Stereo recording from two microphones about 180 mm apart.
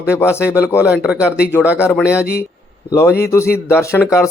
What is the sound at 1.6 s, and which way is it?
Speech, 5° right (ahead or behind).